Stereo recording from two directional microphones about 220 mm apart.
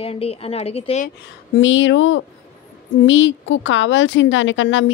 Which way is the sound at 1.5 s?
60° left (ahead or behind).